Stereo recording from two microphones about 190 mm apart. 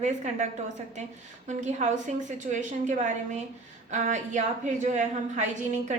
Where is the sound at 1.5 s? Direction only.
40° right (ahead or behind).